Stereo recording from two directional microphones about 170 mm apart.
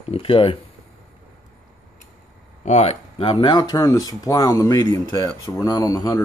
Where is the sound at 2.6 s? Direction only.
40° left (ahead or behind); by 6.2 s 20° left (ahead or behind).